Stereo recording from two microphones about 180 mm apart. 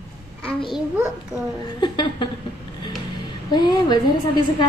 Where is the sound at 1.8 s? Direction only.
25° left (ahead or behind).